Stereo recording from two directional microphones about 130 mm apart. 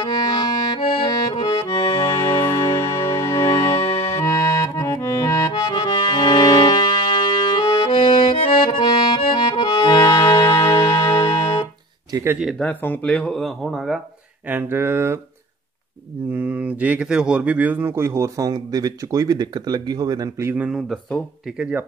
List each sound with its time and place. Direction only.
0.0 s accordion: 35° left (ahead or behind)
12.4 s speech: 5° left (ahead or behind)
14.5 s speech: 15° right (ahead or behind)
16.3 s speech: 15° right (ahead or behind); by 20.2 s 30° right (ahead or behind)
20.3 s speech: 20° right (ahead or behind)
20.6 s speech: centre (ahead or behind)